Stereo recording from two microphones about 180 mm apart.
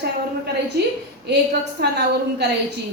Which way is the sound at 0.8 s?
65° right (ahead or behind).